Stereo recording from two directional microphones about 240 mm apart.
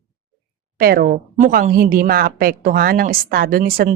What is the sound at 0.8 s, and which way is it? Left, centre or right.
Speech, right.